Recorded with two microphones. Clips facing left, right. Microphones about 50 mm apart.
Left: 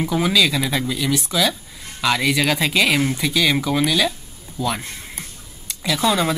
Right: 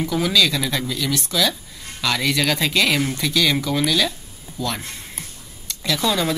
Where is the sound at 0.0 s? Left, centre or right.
Centre.